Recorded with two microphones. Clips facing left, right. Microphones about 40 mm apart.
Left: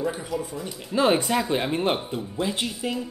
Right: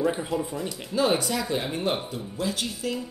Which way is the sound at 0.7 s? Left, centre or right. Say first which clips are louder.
Left 4 dB; left.